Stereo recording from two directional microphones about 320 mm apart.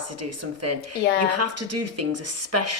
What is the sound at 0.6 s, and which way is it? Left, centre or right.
Speech, right.